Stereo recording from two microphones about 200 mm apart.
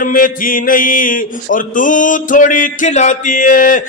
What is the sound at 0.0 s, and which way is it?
Speech, 45° left (ahead or behind).